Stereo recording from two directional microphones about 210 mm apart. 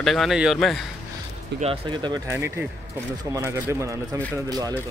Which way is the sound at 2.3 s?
10° right (ahead or behind).